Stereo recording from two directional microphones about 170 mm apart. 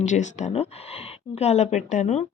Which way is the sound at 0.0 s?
45° left (ahead or behind).